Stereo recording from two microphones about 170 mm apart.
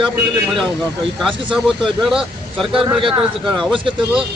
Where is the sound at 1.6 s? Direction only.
Centre (ahead or behind).